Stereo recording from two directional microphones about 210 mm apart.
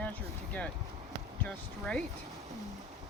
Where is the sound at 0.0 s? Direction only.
5° left (ahead or behind).